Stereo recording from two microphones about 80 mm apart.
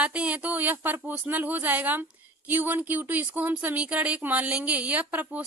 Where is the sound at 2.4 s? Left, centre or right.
Right.